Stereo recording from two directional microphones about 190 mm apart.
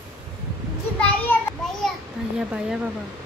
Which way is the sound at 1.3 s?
10° left (ahead or behind).